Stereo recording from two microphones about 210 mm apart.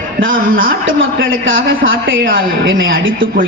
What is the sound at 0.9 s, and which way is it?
A woman's voice, 65° right (ahead or behind).